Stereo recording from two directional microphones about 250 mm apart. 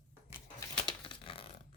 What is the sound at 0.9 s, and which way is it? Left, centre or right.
Dog, centre.